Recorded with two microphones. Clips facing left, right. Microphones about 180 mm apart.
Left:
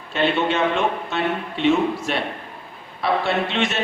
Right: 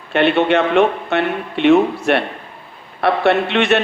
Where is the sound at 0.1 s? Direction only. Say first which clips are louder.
Right 6 dB; 65° right (ahead or behind).